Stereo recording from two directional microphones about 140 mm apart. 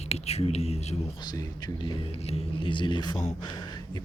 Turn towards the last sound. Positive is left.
turn(degrees=30)  # may be behind; listen again after turning